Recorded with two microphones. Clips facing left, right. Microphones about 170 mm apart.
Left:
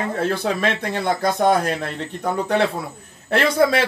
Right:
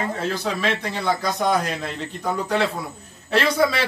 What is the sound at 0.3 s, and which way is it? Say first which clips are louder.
Speech: left 3 dB; 55° left (ahead or behind).